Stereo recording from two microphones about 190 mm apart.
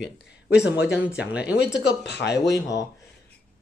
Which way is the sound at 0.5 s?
60° left (ahead or behind).